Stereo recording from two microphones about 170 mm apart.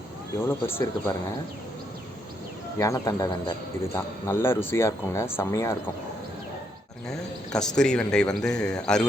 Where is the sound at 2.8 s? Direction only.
20° left (ahead or behind).